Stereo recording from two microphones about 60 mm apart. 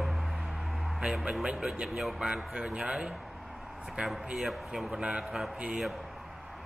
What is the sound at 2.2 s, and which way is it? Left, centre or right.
Speech, centre.